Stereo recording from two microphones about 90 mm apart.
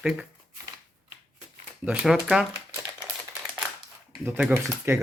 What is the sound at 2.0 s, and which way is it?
Speech, 5° right (ahead or behind).